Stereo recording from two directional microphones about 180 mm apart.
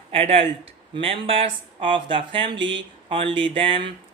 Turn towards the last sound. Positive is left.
turn(degrees=-30)  # may be behind; listen again after turning